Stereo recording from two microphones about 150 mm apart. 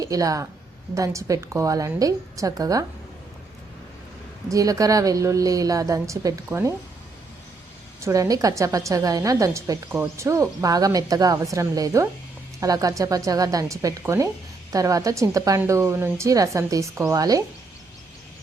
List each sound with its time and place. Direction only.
0.0 s a woman's voice: 20° right (ahead or behind)
4.4 s a woman's voice: 20° right (ahead or behind)
8.0 s a woman's voice: 20° right (ahead or behind)